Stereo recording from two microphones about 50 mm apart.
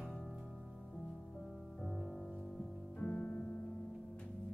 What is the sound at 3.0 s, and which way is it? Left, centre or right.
Music, centre.